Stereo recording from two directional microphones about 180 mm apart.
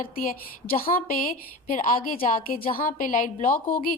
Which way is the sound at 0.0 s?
50° left (ahead or behind).